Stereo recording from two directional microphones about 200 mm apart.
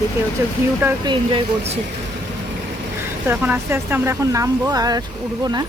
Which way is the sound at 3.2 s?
10° right (ahead or behind).